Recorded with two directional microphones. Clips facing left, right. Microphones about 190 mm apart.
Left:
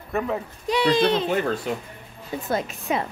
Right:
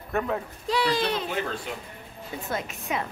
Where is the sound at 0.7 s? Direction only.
20° left (ahead or behind).